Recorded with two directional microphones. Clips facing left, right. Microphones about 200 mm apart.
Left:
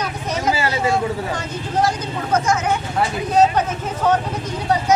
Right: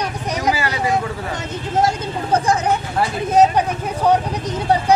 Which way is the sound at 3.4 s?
15° right (ahead or behind).